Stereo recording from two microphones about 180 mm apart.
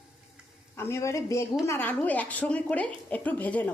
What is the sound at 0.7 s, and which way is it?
A woman's voice, 15° left (ahead or behind).